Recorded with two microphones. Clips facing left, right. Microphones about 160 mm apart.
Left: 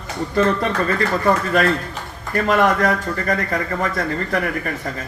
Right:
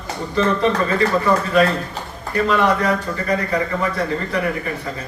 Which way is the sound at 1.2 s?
50° left (ahead or behind).